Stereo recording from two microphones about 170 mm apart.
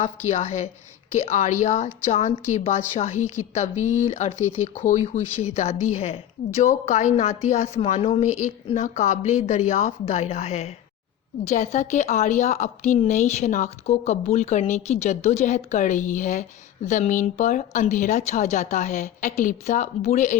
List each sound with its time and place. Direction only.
0.0 s a woman's voice: 40° left (ahead or behind)